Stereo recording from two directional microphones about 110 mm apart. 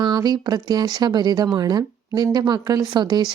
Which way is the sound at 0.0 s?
40° right (ahead or behind).